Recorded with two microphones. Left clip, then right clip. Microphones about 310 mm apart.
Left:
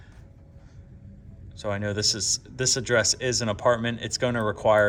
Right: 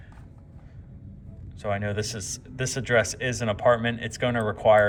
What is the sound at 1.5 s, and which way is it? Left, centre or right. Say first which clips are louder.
Speech: right 1 dB; centre.